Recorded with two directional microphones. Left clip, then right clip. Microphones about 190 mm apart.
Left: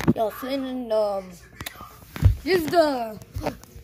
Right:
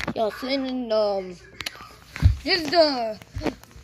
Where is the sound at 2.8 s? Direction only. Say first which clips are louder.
Right 1 dB; 15° right (ahead or behind).